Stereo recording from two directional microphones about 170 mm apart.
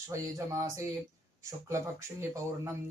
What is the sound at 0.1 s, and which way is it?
Speech, 20° right (ahead or behind).